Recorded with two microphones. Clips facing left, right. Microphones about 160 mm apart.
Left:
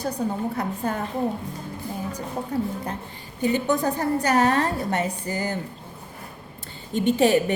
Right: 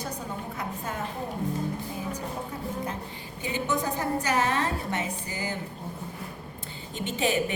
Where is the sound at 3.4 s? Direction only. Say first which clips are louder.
Left 7 dB; 40° left (ahead or behind).